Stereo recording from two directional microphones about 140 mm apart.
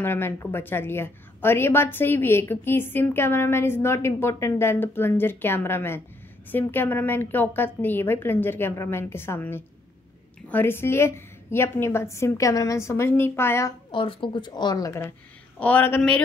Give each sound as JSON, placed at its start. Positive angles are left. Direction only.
{"t": 0.0, "sound": "a woman's voice", "side_deg": 15}
{"t": 13.9, "sound": "a woman's voice", "side_deg": 35}